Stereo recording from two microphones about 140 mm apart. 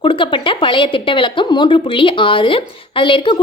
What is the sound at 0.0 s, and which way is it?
A woman's voice, 40° left (ahead or behind).